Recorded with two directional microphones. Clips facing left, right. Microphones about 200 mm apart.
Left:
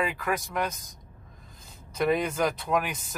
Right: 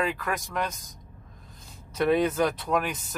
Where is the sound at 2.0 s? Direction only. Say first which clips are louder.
Right 2 dB; centre (ahead or behind).